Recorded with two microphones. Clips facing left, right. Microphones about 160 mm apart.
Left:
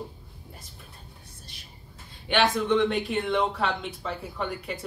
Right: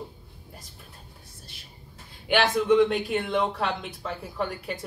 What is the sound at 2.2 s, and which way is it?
Speech, 5° right (ahead or behind).